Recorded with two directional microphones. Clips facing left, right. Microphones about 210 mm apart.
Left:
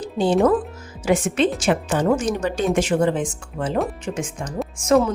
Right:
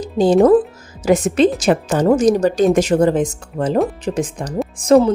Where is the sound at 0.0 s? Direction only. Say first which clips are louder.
Right 6 dB; 40° right (ahead or behind).